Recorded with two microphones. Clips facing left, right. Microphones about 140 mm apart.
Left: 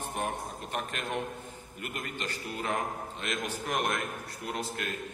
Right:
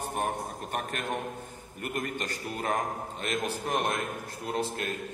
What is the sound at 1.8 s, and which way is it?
Speech, 45° right (ahead or behind).